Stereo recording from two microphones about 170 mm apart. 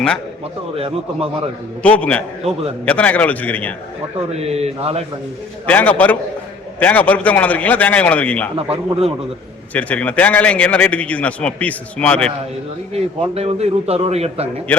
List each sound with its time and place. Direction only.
1.8 s a man's voice: 10° left (ahead or behind)
4.4 s a man's voice: 40° right (ahead or behind)
5.6 s a man's voice: 10° left (ahead or behind)
8.5 s a man's voice: 35° right (ahead or behind)
9.7 s a man's voice: 10° left (ahead or behind)
12.9 s a man's voice: 35° right (ahead or behind)